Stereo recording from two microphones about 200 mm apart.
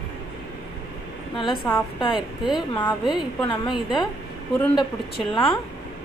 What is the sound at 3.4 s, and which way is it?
Speech, 25° left (ahead or behind).